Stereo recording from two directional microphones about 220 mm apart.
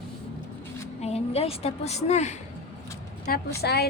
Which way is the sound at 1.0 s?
30° left (ahead or behind).